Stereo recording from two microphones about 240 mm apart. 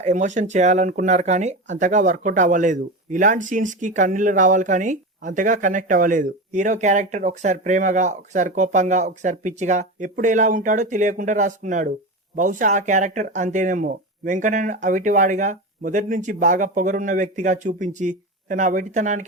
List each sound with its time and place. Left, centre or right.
0.0 s speech: right